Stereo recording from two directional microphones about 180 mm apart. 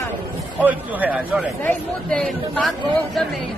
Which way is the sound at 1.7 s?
5° left (ahead or behind).